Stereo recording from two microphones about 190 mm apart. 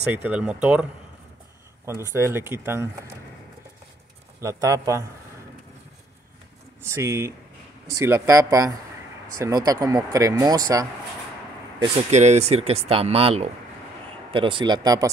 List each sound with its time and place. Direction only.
0.1 s speech: 5° right (ahead or behind)
1.9 s speech: 15° right (ahead or behind)
4.4 s speech: 15° right (ahead or behind)
6.9 s speech: 15° right (ahead or behind)
11.8 s speech: 35° right (ahead or behind); by 15.0 s 20° right (ahead or behind)